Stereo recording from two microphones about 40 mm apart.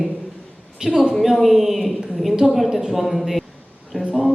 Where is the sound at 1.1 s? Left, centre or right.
Centre.